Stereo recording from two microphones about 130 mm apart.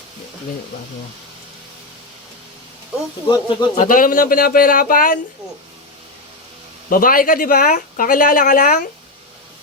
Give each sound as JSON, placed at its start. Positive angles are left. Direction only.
{"t": 3.2, "sound": "speech", "side_deg": 35}
{"t": 3.8, "sound": "speech", "side_deg": 90}
{"t": 6.9, "sound": "speech", "side_deg": 90}